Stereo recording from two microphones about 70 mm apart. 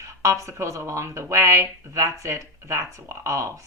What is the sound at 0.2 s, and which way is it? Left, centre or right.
A woman's voice, right.